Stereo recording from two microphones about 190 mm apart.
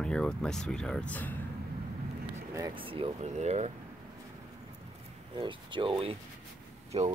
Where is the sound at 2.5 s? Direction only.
25° right (ahead or behind).